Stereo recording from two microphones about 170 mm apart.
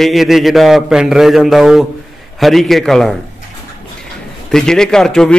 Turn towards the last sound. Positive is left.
turn(degrees=5)  # may be behind; listen again after turning